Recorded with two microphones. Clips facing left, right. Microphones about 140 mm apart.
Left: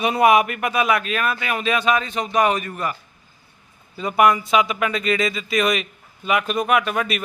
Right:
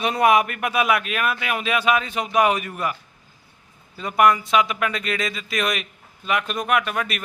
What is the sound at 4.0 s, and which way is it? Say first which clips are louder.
Speech: left 1 dB; centre (ahead or behind).